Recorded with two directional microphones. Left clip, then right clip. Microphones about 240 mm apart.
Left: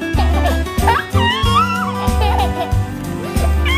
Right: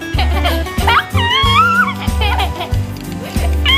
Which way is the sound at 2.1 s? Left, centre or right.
Left.